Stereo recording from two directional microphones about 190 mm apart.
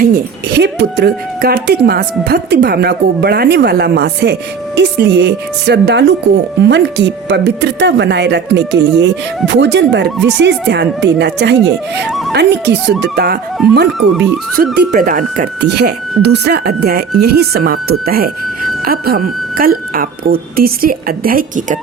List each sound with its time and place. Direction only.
0.0 s a woman's voice: 55° right (ahead or behind)
14.5 s speech: 50° right (ahead or behind)
15.6 s a woman's voice: 60° right (ahead or behind)